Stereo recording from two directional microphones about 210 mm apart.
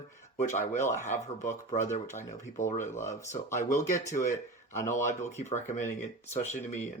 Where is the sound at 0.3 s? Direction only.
35° left (ahead or behind).